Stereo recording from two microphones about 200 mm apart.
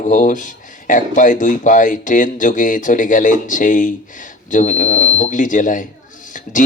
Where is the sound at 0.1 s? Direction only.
40° left (ahead or behind).